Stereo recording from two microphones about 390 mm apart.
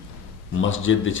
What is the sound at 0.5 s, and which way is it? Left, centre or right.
Speech, left.